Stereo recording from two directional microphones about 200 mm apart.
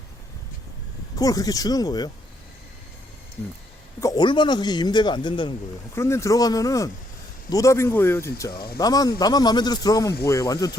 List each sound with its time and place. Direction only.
1.2 s speech: 15° left (ahead or behind)
4.0 s speech: 20° left (ahead or behind)